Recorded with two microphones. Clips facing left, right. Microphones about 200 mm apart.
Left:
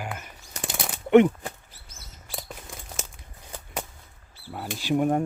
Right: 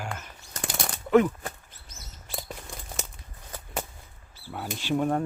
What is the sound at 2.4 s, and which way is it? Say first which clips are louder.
Crumpling: right 1 dB; centre (ahead or behind).